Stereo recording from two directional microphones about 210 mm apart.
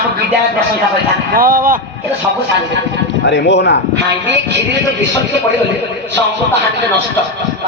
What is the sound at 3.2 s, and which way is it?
Speech, 55° left (ahead or behind).